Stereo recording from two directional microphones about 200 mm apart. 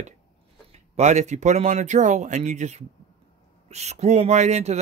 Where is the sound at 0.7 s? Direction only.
35° right (ahead or behind).